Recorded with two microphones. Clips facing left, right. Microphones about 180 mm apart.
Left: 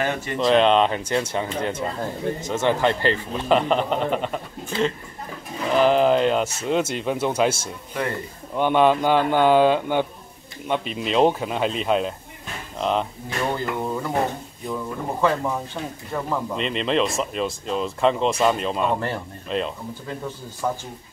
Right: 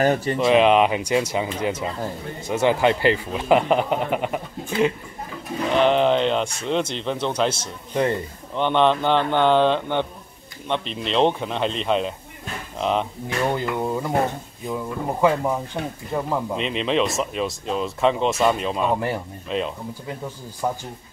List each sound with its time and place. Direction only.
0.0 s speech: 35° right (ahead or behind)
0.4 s speech: 5° right (ahead or behind)
5.7 s speech: centre (ahead or behind)
13.5 s a sound: 15° right (ahead or behind)
14.7 s speech: 15° right (ahead or behind)
16.5 s speech: centre (ahead or behind)
20.6 s speech: 15° right (ahead or behind)